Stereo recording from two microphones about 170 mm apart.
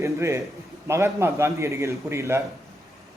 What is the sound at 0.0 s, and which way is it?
A man's voice, 15° right (ahead or behind).